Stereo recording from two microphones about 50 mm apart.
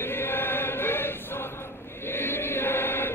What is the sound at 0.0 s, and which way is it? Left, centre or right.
Choir, left.